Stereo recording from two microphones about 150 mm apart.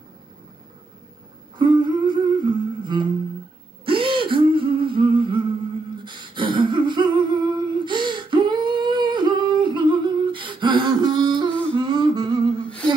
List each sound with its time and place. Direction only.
1.6 s humming: 30° right (ahead or behind)
3.8 s a sound: 35° right (ahead or behind)
6.0 s humming: 35° right (ahead or behind)